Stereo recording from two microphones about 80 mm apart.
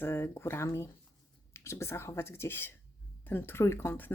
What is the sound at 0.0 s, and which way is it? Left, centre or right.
Speech, left.